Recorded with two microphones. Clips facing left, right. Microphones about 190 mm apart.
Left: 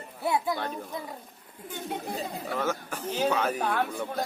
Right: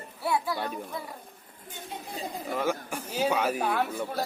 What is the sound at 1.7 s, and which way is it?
Speech, 55° left (ahead or behind).